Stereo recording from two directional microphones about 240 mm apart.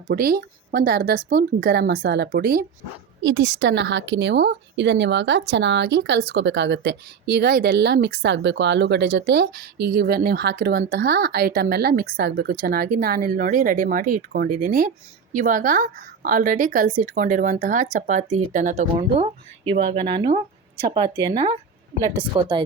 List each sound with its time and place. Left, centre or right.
0.1 s speech: right; by 22.6 s centre